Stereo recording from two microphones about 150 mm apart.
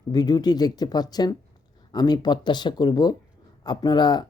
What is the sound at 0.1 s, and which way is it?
Speech, 30° left (ahead or behind).